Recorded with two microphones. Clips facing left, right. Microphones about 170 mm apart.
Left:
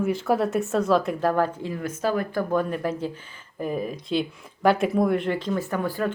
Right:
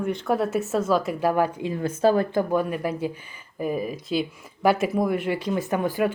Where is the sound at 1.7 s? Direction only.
30° right (ahead or behind).